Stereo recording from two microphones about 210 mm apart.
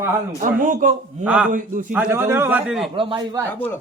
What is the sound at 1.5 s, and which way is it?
Speech, 40° right (ahead or behind).